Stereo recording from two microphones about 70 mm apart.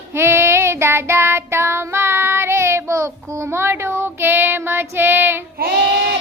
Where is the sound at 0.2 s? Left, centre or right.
Right.